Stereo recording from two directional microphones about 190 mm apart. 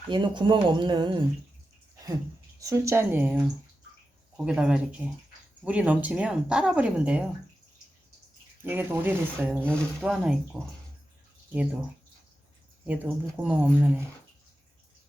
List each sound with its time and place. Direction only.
0.1 s speech: 25° right (ahead or behind)
2.6 s speech: 15° right (ahead or behind)
4.4 s speech: 5° right (ahead or behind)
8.6 s speech: 10° right (ahead or behind)
9.6 s speech: 5° left (ahead or behind)
10.0 s speech: 5° right (ahead or behind)
12.8 s speech: 10° right (ahead or behind)